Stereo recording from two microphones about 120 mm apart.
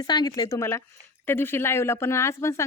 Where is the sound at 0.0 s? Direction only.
35° left (ahead or behind).